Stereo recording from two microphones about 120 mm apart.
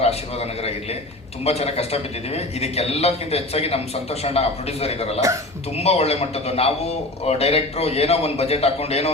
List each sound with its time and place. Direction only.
0.0 s a man's voice: 60° left (ahead or behind)